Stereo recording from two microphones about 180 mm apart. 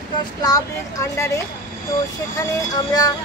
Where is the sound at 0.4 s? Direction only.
20° left (ahead or behind).